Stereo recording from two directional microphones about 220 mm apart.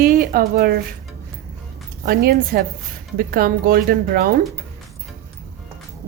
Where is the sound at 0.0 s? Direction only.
40° right (ahead or behind).